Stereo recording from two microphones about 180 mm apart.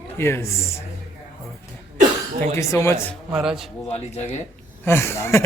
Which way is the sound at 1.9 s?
45° right (ahead or behind).